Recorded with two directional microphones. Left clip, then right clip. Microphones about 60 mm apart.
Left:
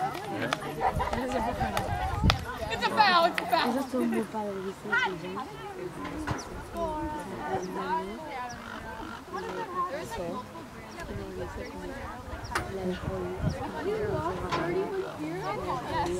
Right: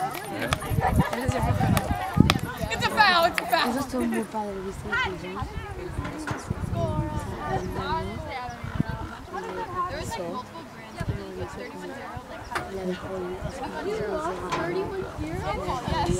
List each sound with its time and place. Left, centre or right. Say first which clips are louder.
0.0 s speech: right 2 dB; right
7.7 s speech: right 2 dB; right
9.3 s speech: right 3 dB; right
13.6 s speech: right 2 dB; right